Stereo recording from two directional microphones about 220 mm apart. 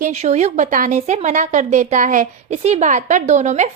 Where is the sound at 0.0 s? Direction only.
30° right (ahead or behind).